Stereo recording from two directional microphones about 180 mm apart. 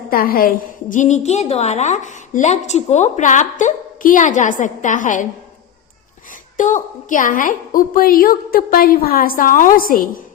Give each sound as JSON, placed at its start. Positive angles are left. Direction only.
{"t": 0.1, "sound": "a woman's voice", "side_deg": 55}
{"t": 6.6, "sound": "a woman's voice", "side_deg": 45}